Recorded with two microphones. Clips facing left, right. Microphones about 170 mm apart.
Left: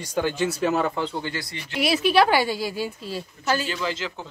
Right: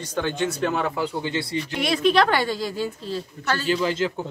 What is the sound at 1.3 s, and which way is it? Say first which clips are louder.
Speech: right 5 dB; 25° right (ahead or behind).